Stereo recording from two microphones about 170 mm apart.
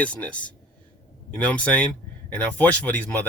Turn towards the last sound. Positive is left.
turn(degrees=10)  # may be behind; listen again after turning